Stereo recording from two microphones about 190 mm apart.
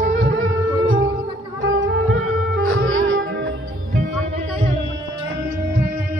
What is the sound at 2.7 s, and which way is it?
Music, 90° right.